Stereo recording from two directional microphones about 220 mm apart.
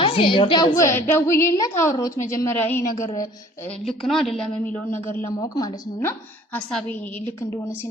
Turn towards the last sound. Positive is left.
turn(degrees=15)  # may be behind; listen again after turning